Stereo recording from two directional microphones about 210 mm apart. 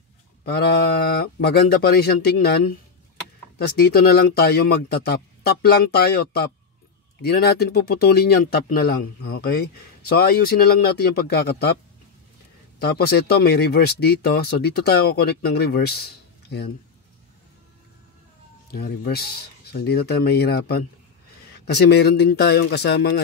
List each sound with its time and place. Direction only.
0.5 s speech: 50° left (ahead or behind)
12.7 s speech: 50° left (ahead or behind)
18.7 s speech: 50° left (ahead or behind)